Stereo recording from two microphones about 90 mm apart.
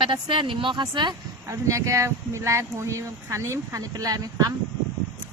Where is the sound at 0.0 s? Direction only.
70° right (ahead or behind).